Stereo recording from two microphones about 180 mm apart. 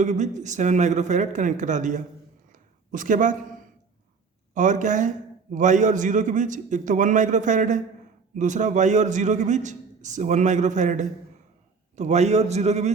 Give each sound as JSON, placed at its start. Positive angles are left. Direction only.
{"t": 0.0, "sound": "a man's voice", "side_deg": -40}
{"t": 2.5, "sound": "a sound", "side_deg": -45}
{"t": 4.5, "sound": "a man's voice", "side_deg": -45}